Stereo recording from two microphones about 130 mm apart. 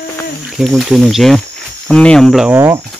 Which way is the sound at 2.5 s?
20° right (ahead or behind).